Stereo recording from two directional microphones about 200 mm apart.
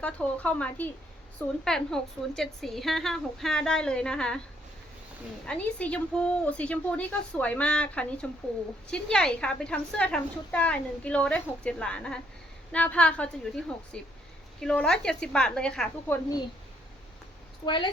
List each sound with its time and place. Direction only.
0.0 s a woman's voice: 5° left (ahead or behind)
5.5 s a woman's voice: 5° left (ahead or behind)
17.7 s a woman's voice: 20° left (ahead or behind)